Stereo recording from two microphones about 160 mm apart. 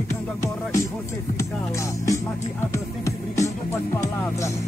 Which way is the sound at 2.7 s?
20° left (ahead or behind).